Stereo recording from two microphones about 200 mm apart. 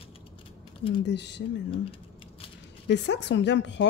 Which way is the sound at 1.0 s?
60° left (ahead or behind).